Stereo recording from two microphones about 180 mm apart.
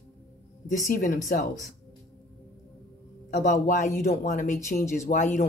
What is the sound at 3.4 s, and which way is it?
Speech, 45° left (ahead or behind).